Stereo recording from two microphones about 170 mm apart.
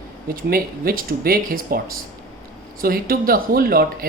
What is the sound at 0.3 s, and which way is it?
Speech, 60° right (ahead or behind).